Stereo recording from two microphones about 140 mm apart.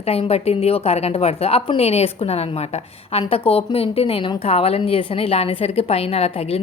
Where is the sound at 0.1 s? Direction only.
45° left (ahead or behind).